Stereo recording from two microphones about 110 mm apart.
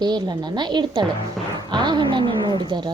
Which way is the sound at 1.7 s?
45° right (ahead or behind).